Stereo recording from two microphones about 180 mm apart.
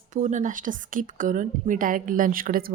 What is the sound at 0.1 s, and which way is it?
A woman's voice, 40° right (ahead or behind).